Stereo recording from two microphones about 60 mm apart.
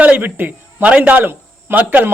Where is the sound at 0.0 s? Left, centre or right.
Right.